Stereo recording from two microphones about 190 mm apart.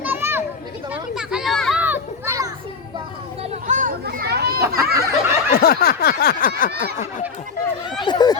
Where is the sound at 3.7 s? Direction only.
45° right (ahead or behind).